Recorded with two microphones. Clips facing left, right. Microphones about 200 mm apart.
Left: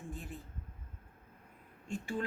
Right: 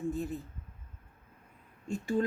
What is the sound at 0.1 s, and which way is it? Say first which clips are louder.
Speech: right 11 dB; 40° right (ahead or behind).